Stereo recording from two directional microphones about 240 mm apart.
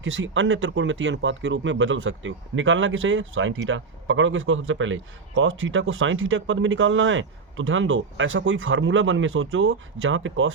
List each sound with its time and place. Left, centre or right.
0.0 s speech: right